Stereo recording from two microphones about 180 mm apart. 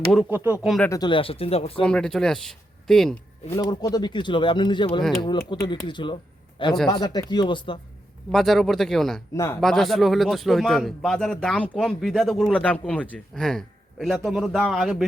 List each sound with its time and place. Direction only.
0.1 s speech: 5° right (ahead or behind)
0.8 s speech: 20° left (ahead or behind)
1.8 s a man's voice: 5° left (ahead or behind)
3.5 s speech: 20° left (ahead or behind)
8.3 s a man's voice: centre (ahead or behind)
9.3 s speech: 15° left (ahead or behind)
9.6 s a man's voice: centre (ahead or behind)